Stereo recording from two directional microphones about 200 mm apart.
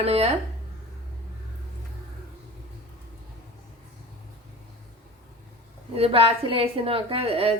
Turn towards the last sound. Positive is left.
turn(degrees=-30)  # may be behind; listen again after turning